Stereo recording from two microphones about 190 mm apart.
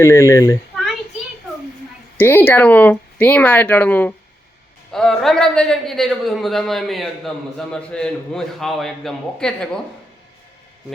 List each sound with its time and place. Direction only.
0.0 s speech: 15° left (ahead or behind)
2.1 s a man's voice: 10° left (ahead or behind)